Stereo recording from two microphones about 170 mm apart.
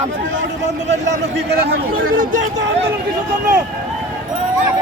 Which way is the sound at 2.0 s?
50° right (ahead or behind).